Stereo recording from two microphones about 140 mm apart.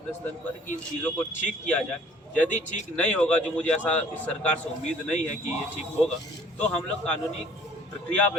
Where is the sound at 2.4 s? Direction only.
60° left (ahead or behind).